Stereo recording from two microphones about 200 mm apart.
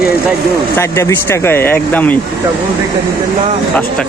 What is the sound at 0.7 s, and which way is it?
Speech, 15° left (ahead or behind).